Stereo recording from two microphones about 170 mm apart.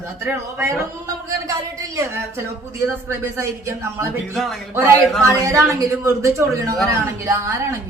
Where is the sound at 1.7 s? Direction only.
20° right (ahead or behind).